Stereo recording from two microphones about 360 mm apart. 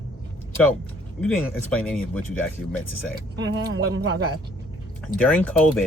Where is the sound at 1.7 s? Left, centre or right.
Centre.